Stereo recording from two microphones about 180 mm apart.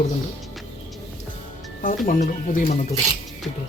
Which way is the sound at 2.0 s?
50° left (ahead or behind).